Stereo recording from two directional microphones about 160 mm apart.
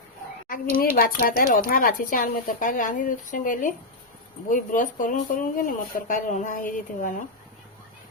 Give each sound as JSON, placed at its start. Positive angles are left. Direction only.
{"t": 0.4, "sound": "speech", "side_deg": 60}